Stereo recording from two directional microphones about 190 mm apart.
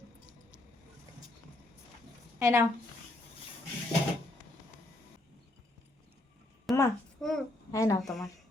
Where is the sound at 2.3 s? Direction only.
15° right (ahead or behind).